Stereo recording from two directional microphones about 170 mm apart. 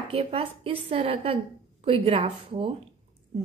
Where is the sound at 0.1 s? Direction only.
35° right (ahead or behind).